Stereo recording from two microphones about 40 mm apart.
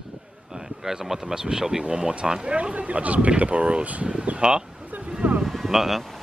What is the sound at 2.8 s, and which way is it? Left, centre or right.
Speech, right.